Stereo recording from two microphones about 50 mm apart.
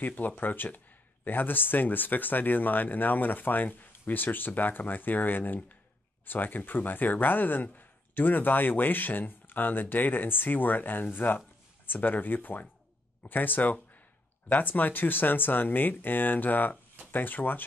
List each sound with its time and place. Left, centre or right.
0.0 s speech: left